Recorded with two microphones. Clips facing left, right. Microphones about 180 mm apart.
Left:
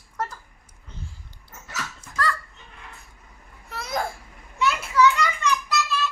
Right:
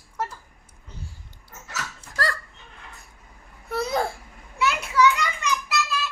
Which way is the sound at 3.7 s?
30° right (ahead or behind).